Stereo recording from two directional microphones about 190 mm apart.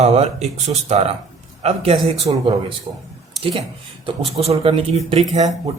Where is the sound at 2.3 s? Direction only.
20° right (ahead or behind).